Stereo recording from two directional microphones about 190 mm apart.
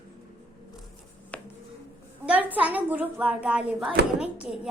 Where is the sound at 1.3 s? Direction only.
5° left (ahead or behind).